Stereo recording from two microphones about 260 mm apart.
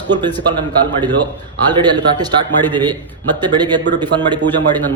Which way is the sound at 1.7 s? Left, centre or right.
Centre.